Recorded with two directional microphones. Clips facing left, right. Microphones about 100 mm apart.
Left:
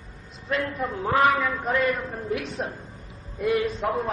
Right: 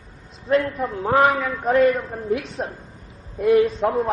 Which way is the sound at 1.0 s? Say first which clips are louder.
Right 3 dB; 35° right (ahead or behind).